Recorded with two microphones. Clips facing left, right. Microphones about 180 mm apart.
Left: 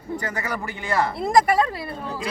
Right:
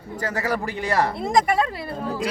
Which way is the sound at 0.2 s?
40° right (ahead or behind).